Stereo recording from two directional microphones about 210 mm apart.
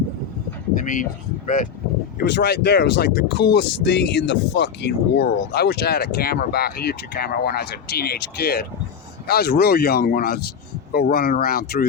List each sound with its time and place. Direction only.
0.7 s speech: 40° left (ahead or behind)
2.1 s speech: 55° left (ahead or behind)